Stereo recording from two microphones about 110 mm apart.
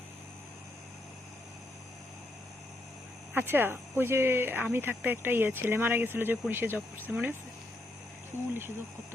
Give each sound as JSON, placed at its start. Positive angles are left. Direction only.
{"t": 3.3, "sound": "speech", "side_deg": -20}